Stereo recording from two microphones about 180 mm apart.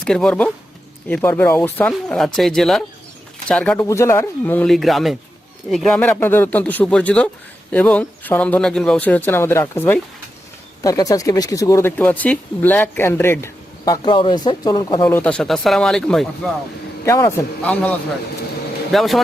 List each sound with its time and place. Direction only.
0.0 s speech: 5° left (ahead or behind)
3.8 s speech: 15° left (ahead or behind)
15.0 s speech: 5° left (ahead or behind)
17.1 s speech: 15° left (ahead or behind)